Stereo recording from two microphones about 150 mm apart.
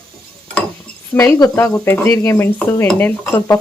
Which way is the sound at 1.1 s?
25° left (ahead or behind).